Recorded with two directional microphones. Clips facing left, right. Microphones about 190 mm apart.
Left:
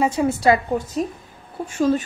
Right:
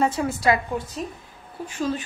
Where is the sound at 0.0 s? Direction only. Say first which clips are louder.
Left 3 dB; 15° left (ahead or behind).